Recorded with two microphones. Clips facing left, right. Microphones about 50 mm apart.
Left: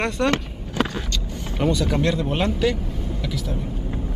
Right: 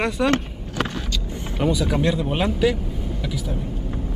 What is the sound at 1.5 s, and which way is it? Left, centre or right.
Speech, centre.